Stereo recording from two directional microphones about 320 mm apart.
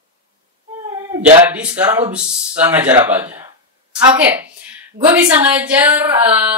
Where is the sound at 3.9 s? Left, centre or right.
Centre.